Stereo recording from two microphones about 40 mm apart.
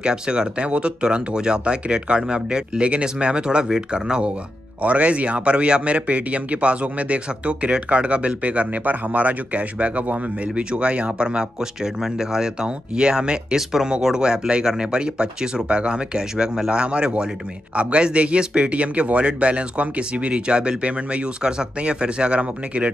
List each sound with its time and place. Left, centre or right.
0.0 s speech: right
4.8 s speech: right
13.6 s speech: centre; by 22.8 s right